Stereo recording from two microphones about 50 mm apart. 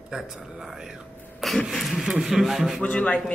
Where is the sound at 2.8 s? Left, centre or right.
Left.